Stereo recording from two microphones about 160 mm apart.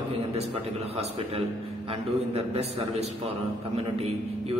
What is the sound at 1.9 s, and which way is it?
A man's voice, 40° right (ahead or behind).